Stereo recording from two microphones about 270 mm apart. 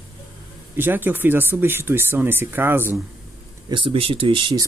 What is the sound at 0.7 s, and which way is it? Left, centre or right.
Speech, centre.